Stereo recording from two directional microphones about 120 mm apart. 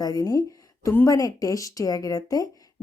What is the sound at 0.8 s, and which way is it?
Speech, 15° left (ahead or behind).